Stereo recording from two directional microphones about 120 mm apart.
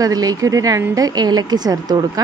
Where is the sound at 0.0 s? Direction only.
30° right (ahead or behind).